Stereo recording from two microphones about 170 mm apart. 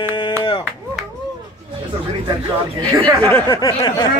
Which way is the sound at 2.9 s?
20° right (ahead or behind).